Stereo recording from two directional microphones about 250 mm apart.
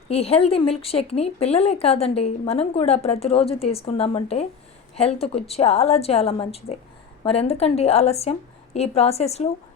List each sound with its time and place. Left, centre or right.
0.1 s speech: left